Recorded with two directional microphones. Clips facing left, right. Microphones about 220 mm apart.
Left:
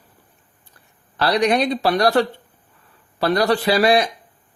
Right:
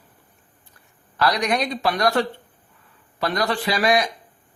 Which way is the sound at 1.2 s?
30° left (ahead or behind).